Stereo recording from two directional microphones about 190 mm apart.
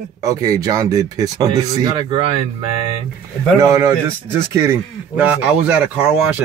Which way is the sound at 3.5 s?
20° right (ahead or behind).